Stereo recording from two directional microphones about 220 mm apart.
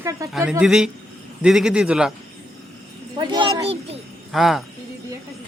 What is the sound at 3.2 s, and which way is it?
Speech, 20° right (ahead or behind).